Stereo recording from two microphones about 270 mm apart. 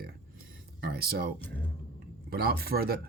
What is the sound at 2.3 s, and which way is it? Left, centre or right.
Speech, right.